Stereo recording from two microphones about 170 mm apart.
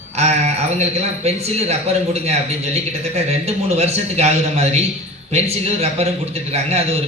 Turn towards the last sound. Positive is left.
turn(degrees=-35)  # may be behind; listen again after turning